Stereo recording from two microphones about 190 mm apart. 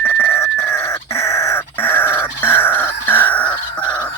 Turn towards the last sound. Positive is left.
turn(degrees=5)  # may be behind; listen again after turning